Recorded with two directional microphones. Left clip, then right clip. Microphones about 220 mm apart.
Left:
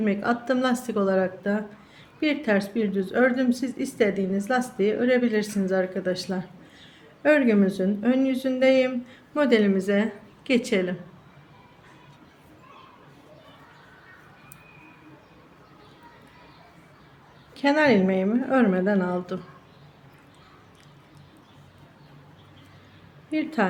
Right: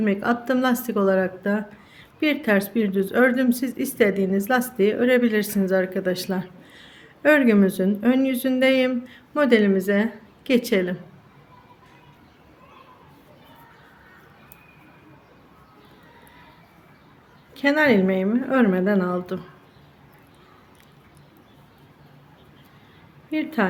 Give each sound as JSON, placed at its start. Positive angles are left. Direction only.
{"t": 0.0, "sound": "speech", "side_deg": -15}
{"t": 17.5, "sound": "speech", "side_deg": -10}
{"t": 23.3, "sound": "speech", "side_deg": -10}